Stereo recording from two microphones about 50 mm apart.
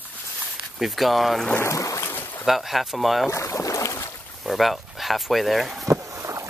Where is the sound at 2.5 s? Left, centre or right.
Centre.